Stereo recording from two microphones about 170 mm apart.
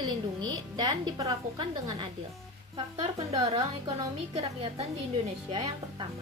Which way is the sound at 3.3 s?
35° right (ahead or behind).